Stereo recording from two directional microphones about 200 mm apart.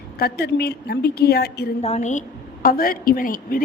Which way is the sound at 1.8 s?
35° left (ahead or behind).